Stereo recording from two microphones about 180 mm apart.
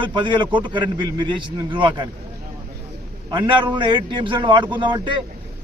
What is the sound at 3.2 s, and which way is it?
A man's voice, 25° right (ahead or behind).